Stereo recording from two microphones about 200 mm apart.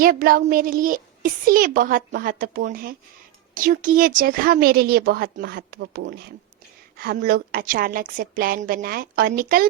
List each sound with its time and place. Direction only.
0.0 s a woman's voice: 45° right (ahead or behind)